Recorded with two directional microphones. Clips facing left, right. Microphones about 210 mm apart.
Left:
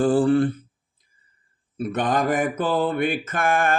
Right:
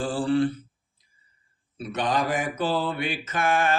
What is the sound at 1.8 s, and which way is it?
Mantra, 55° left (ahead or behind).